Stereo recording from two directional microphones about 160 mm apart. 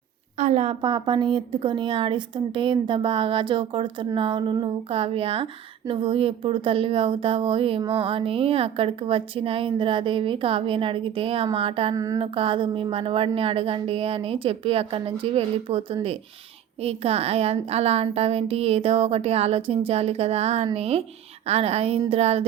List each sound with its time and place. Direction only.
0.3 s speech: 45° right (ahead or behind)
11.9 s a sound: 20° right (ahead or behind)
12.2 s speech: 35° right (ahead or behind)